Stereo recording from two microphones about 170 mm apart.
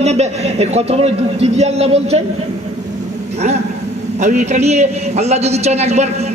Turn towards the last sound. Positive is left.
turn(degrees=-40)  # may be behind; listen again after turning